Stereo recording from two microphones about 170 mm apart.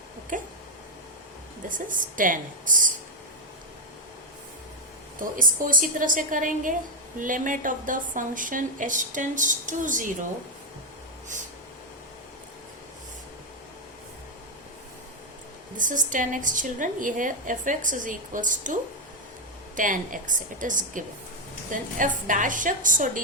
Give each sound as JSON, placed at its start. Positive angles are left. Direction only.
{"t": 0.3, "sound": "a woman's voice", "side_deg": -50}
{"t": 1.6, "sound": "a woman's voice", "side_deg": -50}
{"t": 5.2, "sound": "a woman's voice", "side_deg": -55}
{"t": 15.8, "sound": "a woman's voice", "side_deg": -50}